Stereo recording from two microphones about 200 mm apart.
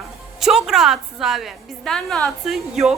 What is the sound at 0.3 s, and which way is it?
A woman's voice, centre (ahead or behind).